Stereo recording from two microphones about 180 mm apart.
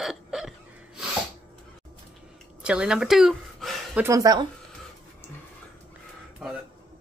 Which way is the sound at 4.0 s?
20° right (ahead or behind).